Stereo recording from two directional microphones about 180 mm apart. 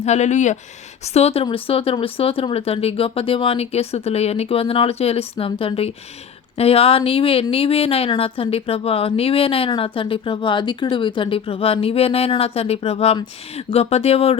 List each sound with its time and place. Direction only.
0.0 s speech: 40° left (ahead or behind)